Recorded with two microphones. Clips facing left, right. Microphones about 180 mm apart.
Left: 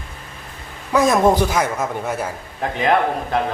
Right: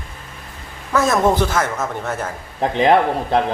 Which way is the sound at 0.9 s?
15° left (ahead or behind).